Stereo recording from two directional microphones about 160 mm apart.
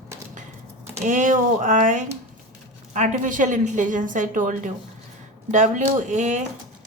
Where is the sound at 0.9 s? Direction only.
50° right (ahead or behind).